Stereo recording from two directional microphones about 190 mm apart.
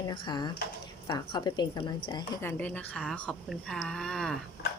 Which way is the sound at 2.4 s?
10° left (ahead or behind).